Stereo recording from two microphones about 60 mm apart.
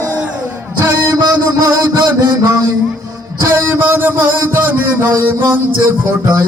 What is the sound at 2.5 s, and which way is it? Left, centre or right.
Music, right.